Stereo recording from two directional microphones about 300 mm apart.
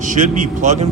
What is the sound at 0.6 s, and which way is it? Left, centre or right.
Speech, right.